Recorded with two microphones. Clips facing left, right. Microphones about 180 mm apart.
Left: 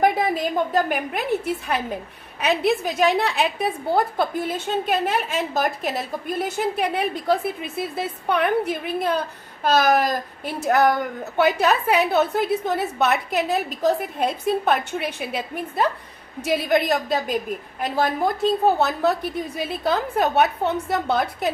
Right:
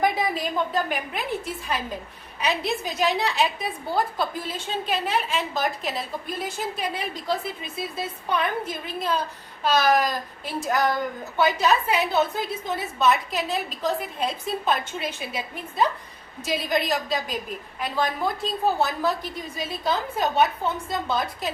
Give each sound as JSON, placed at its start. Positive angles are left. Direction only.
{"t": 0.0, "sound": "a woman's voice", "side_deg": 55}
{"t": 9.6, "sound": "a woman's voice", "side_deg": 45}